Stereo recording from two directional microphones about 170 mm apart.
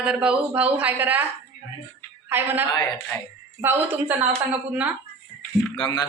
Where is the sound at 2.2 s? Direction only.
10° right (ahead or behind).